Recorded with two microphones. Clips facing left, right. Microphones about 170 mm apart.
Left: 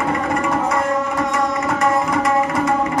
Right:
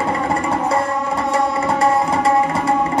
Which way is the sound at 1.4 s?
30° right (ahead or behind).